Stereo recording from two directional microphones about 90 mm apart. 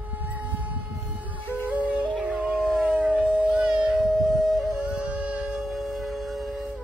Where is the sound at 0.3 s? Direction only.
20° right (ahead or behind).